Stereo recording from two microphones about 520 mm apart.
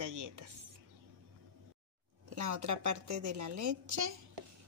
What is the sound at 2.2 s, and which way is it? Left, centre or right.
Speech, right.